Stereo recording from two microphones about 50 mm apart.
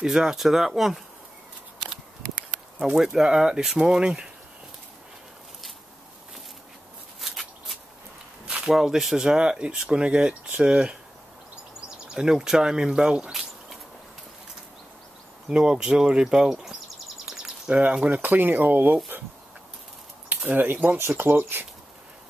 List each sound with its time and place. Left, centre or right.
0.0 s speech: centre
3.1 s speech: centre
4.0 s speech: centre
7.2 s shuffling cards: centre
8.5 s a sound: centre
8.7 s speech: centre
12.1 s speech: centre
13.3 s a sound: centre
15.5 s speech: centre
17.6 s speech: right
20.2 s speech: right